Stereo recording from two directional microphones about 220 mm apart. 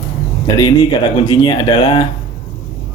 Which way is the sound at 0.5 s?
20° left (ahead or behind).